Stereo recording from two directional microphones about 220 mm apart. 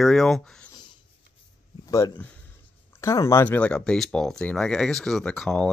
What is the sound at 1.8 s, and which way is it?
Speech, 15° left (ahead or behind).